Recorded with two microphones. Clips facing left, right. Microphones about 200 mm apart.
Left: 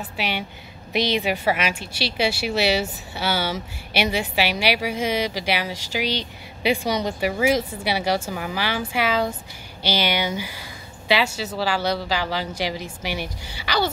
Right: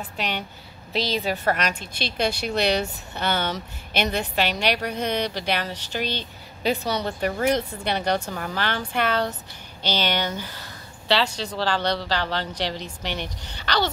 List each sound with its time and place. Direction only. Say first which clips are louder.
0.0 s a woman's voice: left 2 dB; 10° left (ahead or behind)